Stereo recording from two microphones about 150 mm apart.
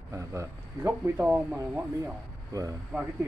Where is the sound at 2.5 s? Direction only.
25° right (ahead or behind).